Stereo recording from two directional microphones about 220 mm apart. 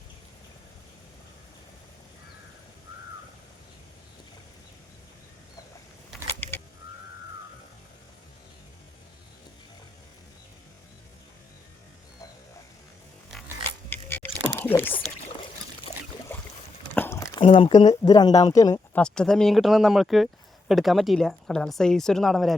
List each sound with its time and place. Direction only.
13.7 s a sound: 10° left (ahead or behind)
14.6 s speech: 10° left (ahead or behind)
16.3 s boat: 10° left (ahead or behind)
16.9 s a sound: 10° left (ahead or behind)
17.4 s speech: 25° left (ahead or behind)
19.0 s speech: 5° left (ahead or behind)